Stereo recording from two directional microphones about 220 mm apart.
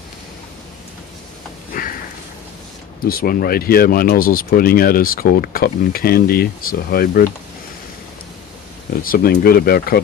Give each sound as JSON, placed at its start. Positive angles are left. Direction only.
{"t": 3.1, "sound": "speech", "side_deg": 40}
{"t": 9.0, "sound": "speech", "side_deg": 45}